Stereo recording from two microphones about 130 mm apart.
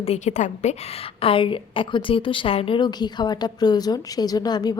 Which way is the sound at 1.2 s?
45° left (ahead or behind).